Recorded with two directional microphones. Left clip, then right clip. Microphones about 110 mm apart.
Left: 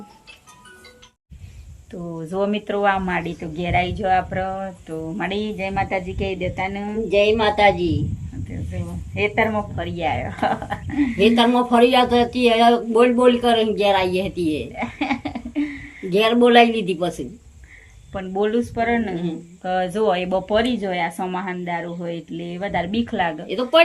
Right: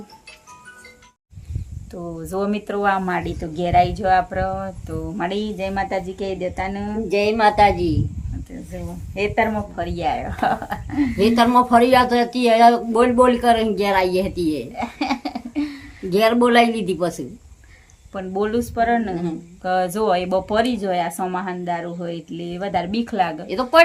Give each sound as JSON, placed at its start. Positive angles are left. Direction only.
{"t": 1.9, "sound": "a woman's voice", "side_deg": 0}
{"t": 2.3, "sound": "a woman's voice", "side_deg": -15}
{"t": 3.5, "sound": "speech", "side_deg": -10}
{"t": 7.1, "sound": "speech", "side_deg": -45}
{"t": 9.1, "sound": "a woman's voice", "side_deg": -10}
{"t": 11.2, "sound": "speech", "side_deg": -45}
{"t": 14.8, "sound": "a sound", "side_deg": -5}
{"t": 16.0, "sound": "speech", "side_deg": -45}
{"t": 18.1, "sound": "a woman's voice", "side_deg": -5}
{"t": 23.5, "sound": "speech", "side_deg": -60}